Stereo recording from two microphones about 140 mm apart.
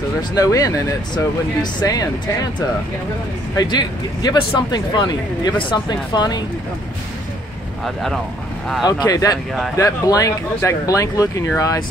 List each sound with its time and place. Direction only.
0.3 s speech: 25° left (ahead or behind)
3.5 s speech: 30° left (ahead or behind)
7.8 s speech: centre (ahead or behind)
8.8 s speech: 25° left (ahead or behind)